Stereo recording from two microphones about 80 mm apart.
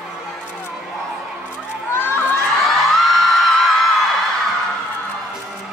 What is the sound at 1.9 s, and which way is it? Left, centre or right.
Children shouting, left.